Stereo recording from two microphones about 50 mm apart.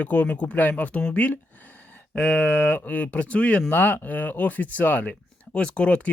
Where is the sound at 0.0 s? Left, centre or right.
Left.